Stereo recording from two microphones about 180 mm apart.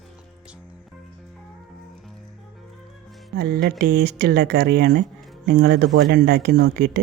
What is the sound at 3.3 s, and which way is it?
Speech, 60° right (ahead or behind).